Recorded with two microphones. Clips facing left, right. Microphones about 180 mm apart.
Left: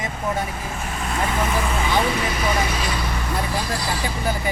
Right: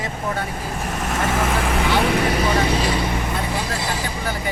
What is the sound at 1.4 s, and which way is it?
Vehicle, 80° right.